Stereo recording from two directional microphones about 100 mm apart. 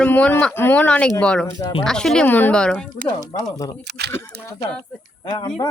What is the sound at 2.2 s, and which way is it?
Speech, 20° left (ahead or behind).